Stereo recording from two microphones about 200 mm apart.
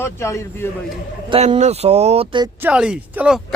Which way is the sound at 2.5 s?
5° right (ahead or behind).